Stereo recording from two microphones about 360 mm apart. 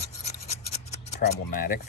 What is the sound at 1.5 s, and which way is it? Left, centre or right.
Speech, left.